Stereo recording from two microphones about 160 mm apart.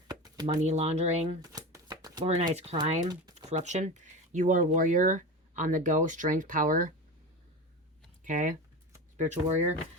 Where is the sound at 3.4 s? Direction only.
45° right (ahead or behind).